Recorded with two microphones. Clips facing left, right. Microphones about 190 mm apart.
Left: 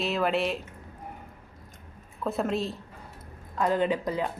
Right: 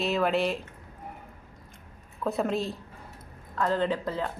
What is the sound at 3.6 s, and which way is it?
Speech, 15° left (ahead or behind).